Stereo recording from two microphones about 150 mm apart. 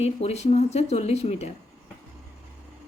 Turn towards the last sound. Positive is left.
turn(degrees=45)  # may be behind; listen again after turning